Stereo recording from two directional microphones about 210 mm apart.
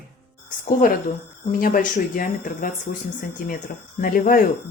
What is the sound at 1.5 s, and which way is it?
Speech, 40° left (ahead or behind).